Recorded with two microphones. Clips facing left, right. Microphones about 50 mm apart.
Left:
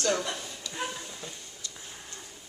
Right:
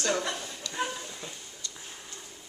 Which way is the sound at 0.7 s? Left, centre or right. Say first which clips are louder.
Right 3 dB; centre.